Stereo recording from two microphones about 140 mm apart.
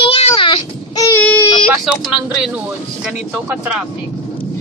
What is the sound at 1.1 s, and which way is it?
Speech, 10° left (ahead or behind).